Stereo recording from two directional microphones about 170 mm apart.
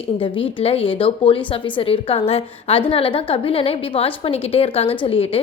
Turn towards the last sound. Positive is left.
turn(degrees=35)  # may be behind; listen again after turning